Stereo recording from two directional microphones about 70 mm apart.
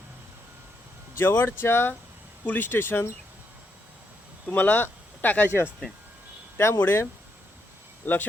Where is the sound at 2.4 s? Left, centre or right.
Left.